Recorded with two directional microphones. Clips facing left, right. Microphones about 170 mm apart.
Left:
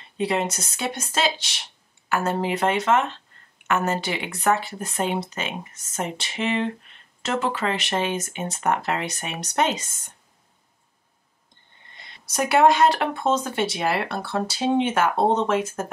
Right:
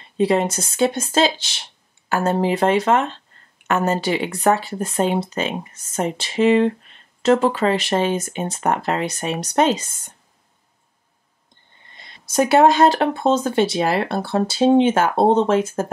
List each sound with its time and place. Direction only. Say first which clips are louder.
0.2 s speech: right 6 dB; 35° right (ahead or behind)
12.4 s speech: right 3 dB; 30° right (ahead or behind)